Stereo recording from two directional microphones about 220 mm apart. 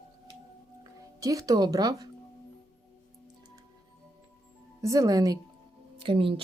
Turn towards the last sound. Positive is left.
turn(degrees=-25)  # may be behind; listen again after turning